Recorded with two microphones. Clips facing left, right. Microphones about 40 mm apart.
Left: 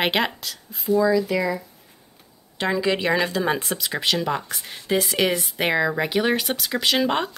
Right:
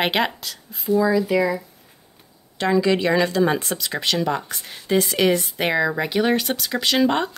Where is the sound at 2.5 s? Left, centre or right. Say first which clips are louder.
Right 3 dB; centre.